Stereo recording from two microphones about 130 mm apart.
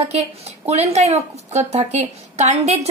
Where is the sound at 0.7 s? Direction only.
55° right (ahead or behind).